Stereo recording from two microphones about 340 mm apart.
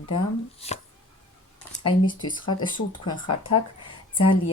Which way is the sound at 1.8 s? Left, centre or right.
Centre.